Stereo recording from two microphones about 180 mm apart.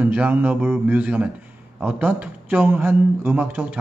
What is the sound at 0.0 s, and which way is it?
A man's voice, 10° right (ahead or behind).